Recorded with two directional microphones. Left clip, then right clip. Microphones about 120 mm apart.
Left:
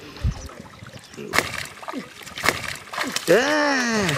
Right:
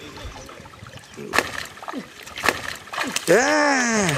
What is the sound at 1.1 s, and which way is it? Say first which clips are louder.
Rowboat: even; 5° left (ahead or behind).